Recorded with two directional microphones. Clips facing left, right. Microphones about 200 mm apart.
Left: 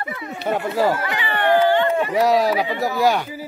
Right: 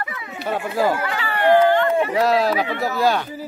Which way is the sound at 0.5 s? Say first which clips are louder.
Left 1 dB; 10° right (ahead or behind).